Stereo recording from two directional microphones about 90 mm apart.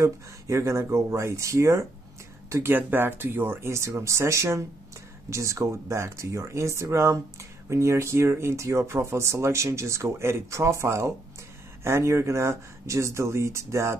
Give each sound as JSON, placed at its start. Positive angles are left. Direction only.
{"t": 0.0, "sound": "speech", "side_deg": -35}